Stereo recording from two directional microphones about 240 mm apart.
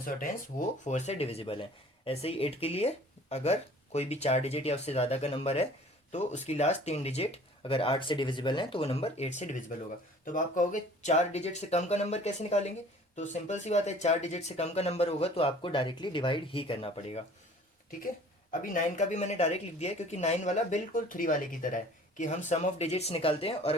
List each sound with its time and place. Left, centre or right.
0.9 s speech: left
18.6 s speech: left